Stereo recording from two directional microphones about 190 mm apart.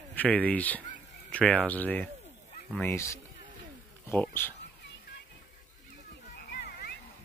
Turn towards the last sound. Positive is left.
turn(degrees=55)  # may be behind; listen again after turning